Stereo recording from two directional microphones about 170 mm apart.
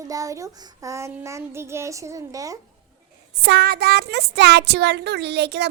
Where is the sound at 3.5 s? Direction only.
70° right (ahead or behind).